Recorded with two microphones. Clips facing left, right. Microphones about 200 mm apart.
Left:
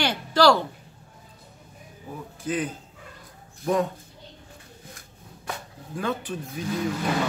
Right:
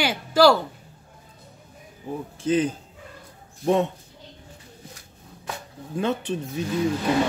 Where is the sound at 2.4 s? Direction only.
30° right (ahead or behind).